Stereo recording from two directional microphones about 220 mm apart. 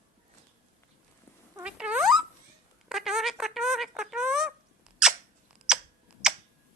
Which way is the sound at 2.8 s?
Centre (ahead or behind).